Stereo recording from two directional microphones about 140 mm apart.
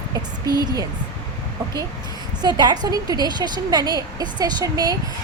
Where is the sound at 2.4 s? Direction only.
30° right (ahead or behind).